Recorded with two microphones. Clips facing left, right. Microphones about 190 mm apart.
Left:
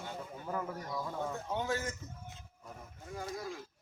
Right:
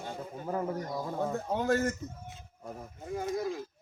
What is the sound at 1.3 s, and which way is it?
Speech, 60° right (ahead or behind).